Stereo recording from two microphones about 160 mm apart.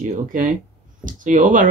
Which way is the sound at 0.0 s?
55° right (ahead or behind).